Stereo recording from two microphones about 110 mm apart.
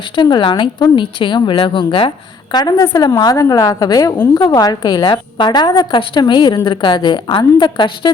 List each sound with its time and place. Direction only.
0.2 s a woman's voice: 45° left (ahead or behind)